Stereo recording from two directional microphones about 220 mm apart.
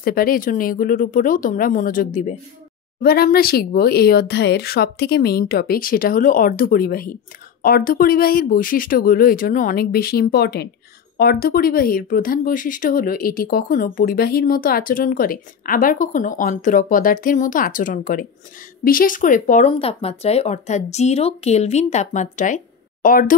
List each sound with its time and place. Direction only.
0.0 s speech: 40° left (ahead or behind)